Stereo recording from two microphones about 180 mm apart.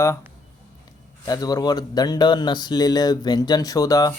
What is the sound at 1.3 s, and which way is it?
Speech, 20° left (ahead or behind).